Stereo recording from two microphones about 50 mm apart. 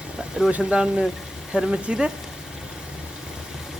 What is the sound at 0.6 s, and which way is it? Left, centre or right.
Speech, centre.